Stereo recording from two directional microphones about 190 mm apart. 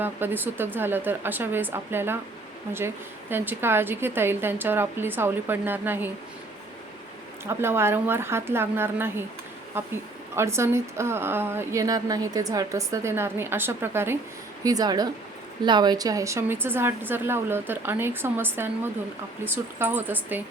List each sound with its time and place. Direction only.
0.0 s a woman's voice: 10° right (ahead or behind)
7.4 s a woman's voice: 15° right (ahead or behind)